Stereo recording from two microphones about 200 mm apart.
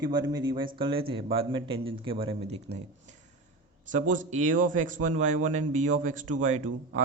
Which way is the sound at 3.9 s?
40° right (ahead or behind).